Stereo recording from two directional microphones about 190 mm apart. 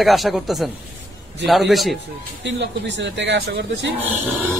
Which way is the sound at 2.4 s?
70° right (ahead or behind).